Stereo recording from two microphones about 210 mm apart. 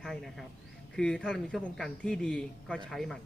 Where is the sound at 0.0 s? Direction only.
Centre (ahead or behind).